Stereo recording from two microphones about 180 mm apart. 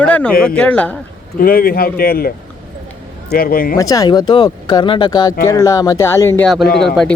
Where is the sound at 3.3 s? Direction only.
55° left (ahead or behind).